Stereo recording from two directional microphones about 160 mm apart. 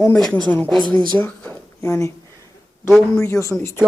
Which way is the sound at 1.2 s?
10° left (ahead or behind).